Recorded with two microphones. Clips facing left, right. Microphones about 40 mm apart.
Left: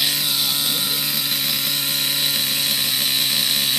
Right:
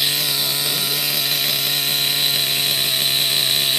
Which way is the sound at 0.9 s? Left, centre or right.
Right.